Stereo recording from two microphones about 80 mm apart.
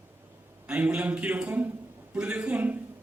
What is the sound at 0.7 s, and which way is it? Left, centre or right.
A man's voice, centre.